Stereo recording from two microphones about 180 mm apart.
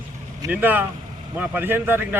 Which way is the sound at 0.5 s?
10° right (ahead or behind).